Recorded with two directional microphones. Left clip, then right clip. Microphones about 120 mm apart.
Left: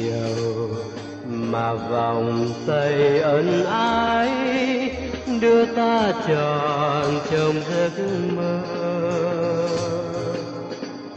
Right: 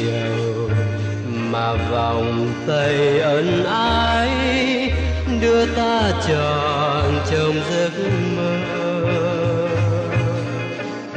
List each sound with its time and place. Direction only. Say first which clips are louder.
1.5 s music: right 2 dB; 35° left (ahead or behind)